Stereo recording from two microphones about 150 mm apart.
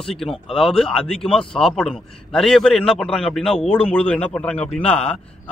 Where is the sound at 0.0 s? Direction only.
5° left (ahead or behind).